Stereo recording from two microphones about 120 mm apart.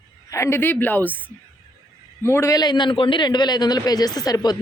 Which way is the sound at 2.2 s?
20° left (ahead or behind).